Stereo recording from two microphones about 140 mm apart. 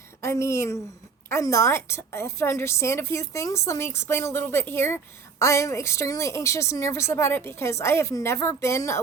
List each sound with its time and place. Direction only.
0.2 s a woman's voice: 20° left (ahead or behind)